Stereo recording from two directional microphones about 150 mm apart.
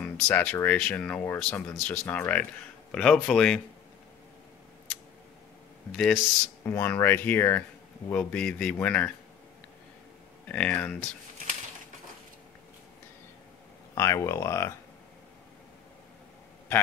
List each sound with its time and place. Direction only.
0.2 s speech: 10° left (ahead or behind)
5.9 s speech: 5° left (ahead or behind)
10.5 s speech: 10° left (ahead or behind)
13.9 s speech: 20° left (ahead or behind)